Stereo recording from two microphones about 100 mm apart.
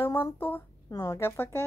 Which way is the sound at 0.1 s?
20° left (ahead or behind).